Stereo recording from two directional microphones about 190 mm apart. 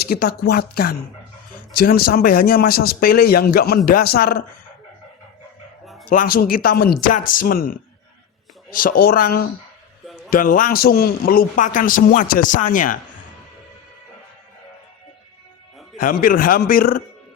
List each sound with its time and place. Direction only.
0.0 s a man's voice: 55° left (ahead or behind)
5.8 s bow-wow: centre (ahead or behind)
6.1 s a man's voice: 50° left (ahead or behind)
16.0 s a man's voice: 45° left (ahead or behind)